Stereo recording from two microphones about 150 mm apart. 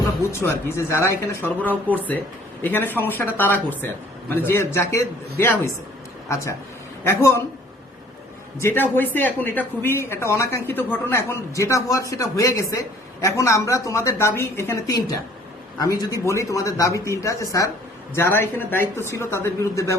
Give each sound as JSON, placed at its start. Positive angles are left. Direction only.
{"t": 0.3, "sound": "speech", "side_deg": 15}
{"t": 7.0, "sound": "speech", "side_deg": 15}
{"t": 8.6, "sound": "a woman's voice", "side_deg": 15}